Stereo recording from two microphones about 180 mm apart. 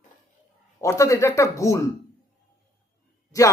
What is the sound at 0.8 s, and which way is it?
Speech, 15° left (ahead or behind).